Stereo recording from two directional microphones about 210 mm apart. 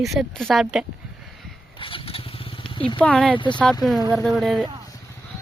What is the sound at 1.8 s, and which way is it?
Vehicle, 25° left (ahead or behind).